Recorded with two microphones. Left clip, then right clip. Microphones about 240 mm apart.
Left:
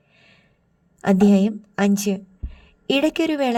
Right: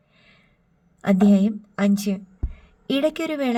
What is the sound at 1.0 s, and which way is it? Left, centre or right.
A woman's voice, left.